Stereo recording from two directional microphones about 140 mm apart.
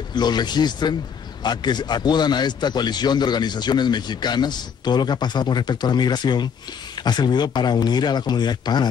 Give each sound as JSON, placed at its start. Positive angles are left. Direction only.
{"t": 0.1, "sound": "a man's voice", "side_deg": 30}